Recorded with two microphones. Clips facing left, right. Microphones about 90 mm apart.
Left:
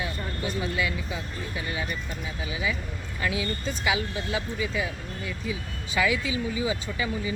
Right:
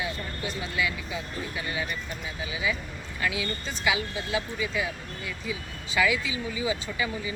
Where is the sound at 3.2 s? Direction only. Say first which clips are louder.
Left 1 dB; 30° left (ahead or behind).